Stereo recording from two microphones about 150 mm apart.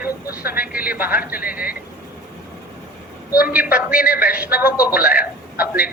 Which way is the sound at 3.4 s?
10° right (ahead or behind).